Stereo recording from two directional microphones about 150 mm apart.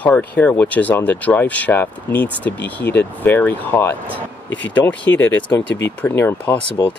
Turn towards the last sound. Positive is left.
turn(degrees=25)  # may be behind; listen again after turning